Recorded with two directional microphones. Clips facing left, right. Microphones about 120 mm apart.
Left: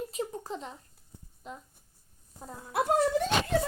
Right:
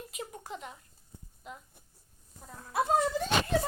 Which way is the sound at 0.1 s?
35° left (ahead or behind).